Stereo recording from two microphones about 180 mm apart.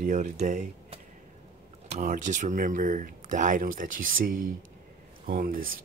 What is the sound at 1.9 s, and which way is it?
Speech, 45° right (ahead or behind).